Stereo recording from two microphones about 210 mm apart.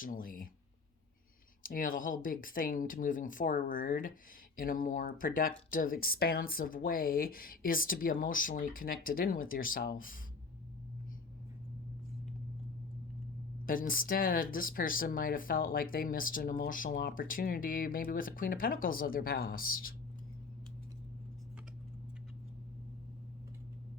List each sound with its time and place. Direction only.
0.0 s speech: 40° left (ahead or behind)
1.6 s speech: 40° left (ahead or behind)
13.7 s speech: 40° left (ahead or behind)